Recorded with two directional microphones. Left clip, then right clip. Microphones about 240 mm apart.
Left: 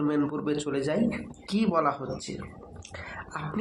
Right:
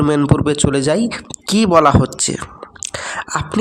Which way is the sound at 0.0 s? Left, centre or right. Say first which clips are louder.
Right 13 dB; right.